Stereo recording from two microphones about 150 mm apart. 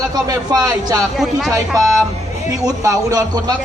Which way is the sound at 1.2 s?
Centre (ahead or behind).